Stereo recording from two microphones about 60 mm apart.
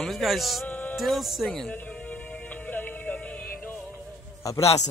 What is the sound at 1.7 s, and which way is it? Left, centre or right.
Music, left.